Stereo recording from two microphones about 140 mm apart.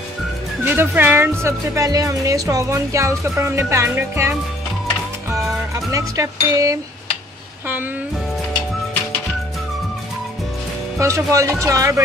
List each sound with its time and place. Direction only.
0.7 s a woman's voice: 15° right (ahead or behind)
5.9 s a woman's voice: 25° right (ahead or behind)
11.0 s a woman's voice: 20° right (ahead or behind)